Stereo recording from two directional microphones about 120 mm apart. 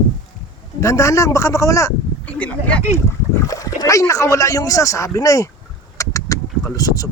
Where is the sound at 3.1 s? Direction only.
25° left (ahead or behind).